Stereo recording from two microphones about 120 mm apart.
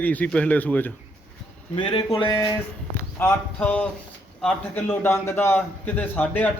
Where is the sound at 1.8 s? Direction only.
45° left (ahead or behind).